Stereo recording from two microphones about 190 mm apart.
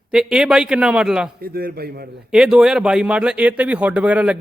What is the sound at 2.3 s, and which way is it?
Speech, 5° right (ahead or behind).